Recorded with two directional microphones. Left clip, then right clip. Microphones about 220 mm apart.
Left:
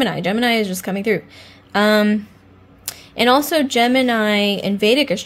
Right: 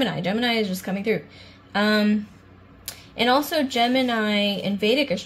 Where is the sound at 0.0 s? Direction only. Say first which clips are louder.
Left 5 dB; 30° left (ahead or behind).